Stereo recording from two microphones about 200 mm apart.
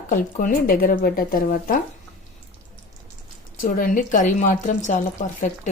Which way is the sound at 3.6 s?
40° left (ahead or behind).